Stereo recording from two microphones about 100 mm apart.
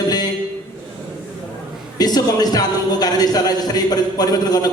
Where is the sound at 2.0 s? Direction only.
40° left (ahead or behind).